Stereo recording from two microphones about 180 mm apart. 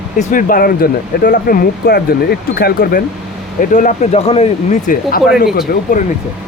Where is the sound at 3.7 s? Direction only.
45° left (ahead or behind).